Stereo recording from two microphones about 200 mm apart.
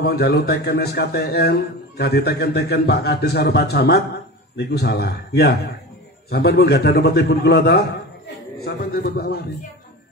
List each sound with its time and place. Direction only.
0.0 s a man's voice: 50° left (ahead or behind)